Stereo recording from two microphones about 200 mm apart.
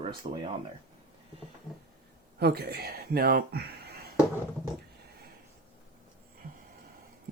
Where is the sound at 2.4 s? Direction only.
50° right (ahead or behind).